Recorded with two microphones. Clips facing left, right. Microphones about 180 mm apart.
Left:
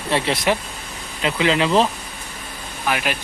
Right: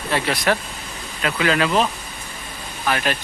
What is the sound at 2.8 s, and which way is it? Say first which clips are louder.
Speech: right 1 dB; 10° left (ahead or behind).